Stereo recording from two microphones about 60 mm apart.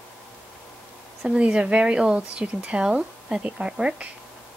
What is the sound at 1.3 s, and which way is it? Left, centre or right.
Speech, centre.